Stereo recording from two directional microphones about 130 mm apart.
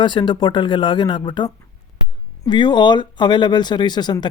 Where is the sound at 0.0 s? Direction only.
35° left (ahead or behind).